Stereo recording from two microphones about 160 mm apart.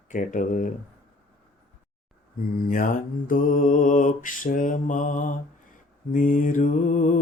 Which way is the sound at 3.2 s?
60° left (ahead or behind).